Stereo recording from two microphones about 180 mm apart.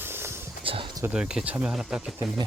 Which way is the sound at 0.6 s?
30° right (ahead or behind).